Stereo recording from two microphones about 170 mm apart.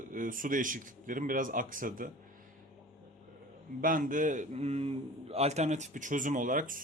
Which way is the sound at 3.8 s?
50° right (ahead or behind).